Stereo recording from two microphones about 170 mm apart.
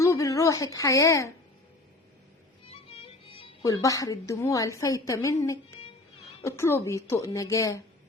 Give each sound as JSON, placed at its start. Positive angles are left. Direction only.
{"t": 0.0, "sound": "a woman's voice", "side_deg": 20}
{"t": 2.9, "sound": "music", "side_deg": 35}
{"t": 3.6, "sound": "a woman's voice", "side_deg": 20}